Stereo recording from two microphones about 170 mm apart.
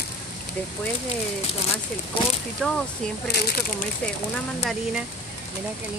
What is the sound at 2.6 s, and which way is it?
Speech, 5° left (ahead or behind).